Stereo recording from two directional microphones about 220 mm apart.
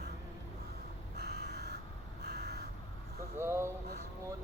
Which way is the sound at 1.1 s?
45° right (ahead or behind).